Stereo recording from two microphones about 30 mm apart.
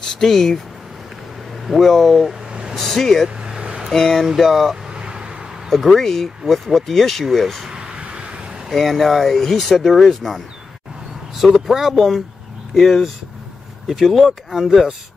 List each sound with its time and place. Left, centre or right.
0.2 s speech: centre
1.6 s speech: centre
2.7 s speech: centre
3.3 s vehicle: right
3.9 s speech: centre
4.4 s speech: centre
4.8 s vehicle: right
5.7 s speech: centre
8.0 s vehicle: right
8.7 s speech: centre
11.5 s speech: centre
14.1 s speech: centre